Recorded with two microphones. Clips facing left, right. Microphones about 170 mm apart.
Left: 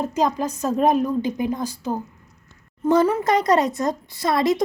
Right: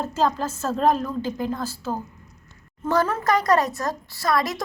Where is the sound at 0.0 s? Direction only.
15° left (ahead or behind).